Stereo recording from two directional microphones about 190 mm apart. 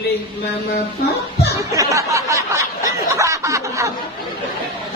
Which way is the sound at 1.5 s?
15° right (ahead or behind).